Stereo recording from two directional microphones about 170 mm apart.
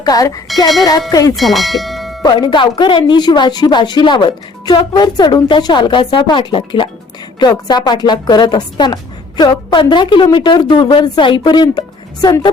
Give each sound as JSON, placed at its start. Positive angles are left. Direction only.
{"t": 0.0, "sound": "speech", "side_deg": 20}
{"t": 1.4, "sound": "speech", "side_deg": 0}
{"t": 2.2, "sound": "speech", "side_deg": 25}